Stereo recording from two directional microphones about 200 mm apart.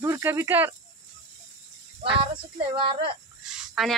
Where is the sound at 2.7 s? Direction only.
25° right (ahead or behind).